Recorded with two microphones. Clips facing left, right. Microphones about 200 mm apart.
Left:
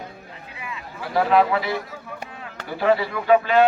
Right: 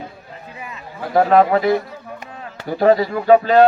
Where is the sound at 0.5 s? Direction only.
40° right (ahead or behind).